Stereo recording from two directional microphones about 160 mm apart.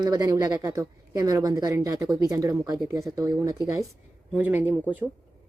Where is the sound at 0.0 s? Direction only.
25° right (ahead or behind).